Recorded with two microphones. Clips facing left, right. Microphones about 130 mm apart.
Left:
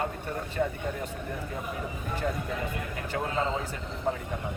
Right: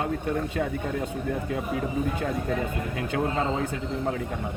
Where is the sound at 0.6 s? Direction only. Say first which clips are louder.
Left 4 dB; 70° right (ahead or behind).